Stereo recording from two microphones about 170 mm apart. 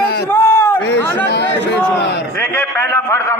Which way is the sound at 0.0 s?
70° left (ahead or behind).